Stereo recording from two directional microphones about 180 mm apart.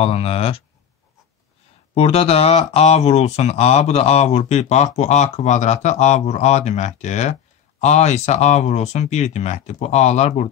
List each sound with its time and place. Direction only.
0.0 s speech: 35° left (ahead or behind)
2.0 s speech: 35° left (ahead or behind)